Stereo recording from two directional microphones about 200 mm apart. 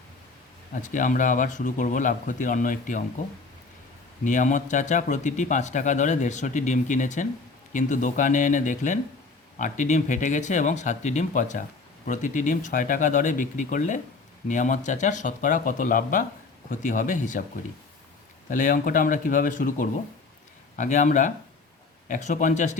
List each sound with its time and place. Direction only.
0.7 s speech: 40° left (ahead or behind)
4.2 s speech: 40° left (ahead or behind)
18.4 s speech: 40° left (ahead or behind)